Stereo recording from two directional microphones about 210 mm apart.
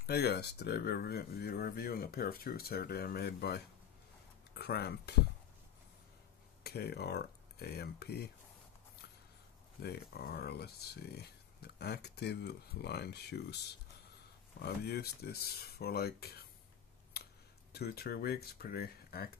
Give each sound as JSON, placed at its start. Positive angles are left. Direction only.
{"t": 0.0, "sound": "speech", "side_deg": 50}
{"t": 6.6, "sound": "speech", "side_deg": 50}
{"t": 9.8, "sound": "speech", "side_deg": 50}
{"t": 14.6, "sound": "speech", "side_deg": 50}
{"t": 17.1, "sound": "a sound", "side_deg": 50}
{"t": 17.7, "sound": "speech", "side_deg": 50}